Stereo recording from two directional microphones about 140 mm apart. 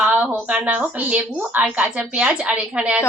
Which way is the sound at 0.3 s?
10° right (ahead or behind).